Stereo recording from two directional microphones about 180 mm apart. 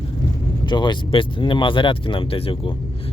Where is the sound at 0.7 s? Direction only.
25° left (ahead or behind).